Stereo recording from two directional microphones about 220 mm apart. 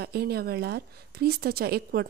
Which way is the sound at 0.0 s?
45° right (ahead or behind).